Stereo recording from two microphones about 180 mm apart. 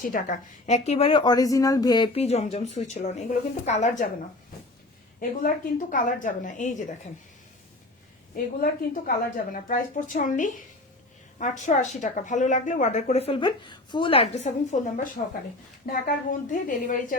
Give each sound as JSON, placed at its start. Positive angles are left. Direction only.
{"t": 0.0, "sound": "a woman's voice", "side_deg": 50}
{"t": 2.1, "sound": "a woman's voice", "side_deg": 35}
{"t": 5.4, "sound": "a woman's voice", "side_deg": 50}
{"t": 8.6, "sound": "a woman's voice", "side_deg": 50}